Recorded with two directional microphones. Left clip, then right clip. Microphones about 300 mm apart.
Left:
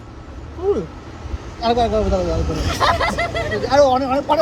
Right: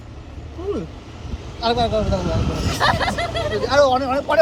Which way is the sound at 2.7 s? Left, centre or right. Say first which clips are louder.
Left 2 dB; centre.